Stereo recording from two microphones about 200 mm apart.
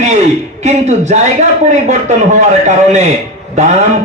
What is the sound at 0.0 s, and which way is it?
A man's voice, 35° right (ahead or behind).